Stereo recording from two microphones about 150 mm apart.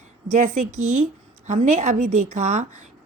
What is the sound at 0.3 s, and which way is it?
A woman's voice, 55° right (ahead or behind).